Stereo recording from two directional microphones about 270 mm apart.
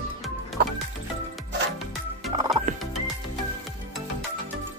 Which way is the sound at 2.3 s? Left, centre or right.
Centre.